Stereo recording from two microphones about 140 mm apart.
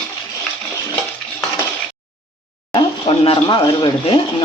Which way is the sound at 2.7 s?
35° left (ahead or behind).